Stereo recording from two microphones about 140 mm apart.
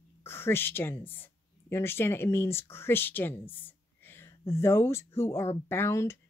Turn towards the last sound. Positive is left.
turn(degrees=20)  # may be behind; listen again after turning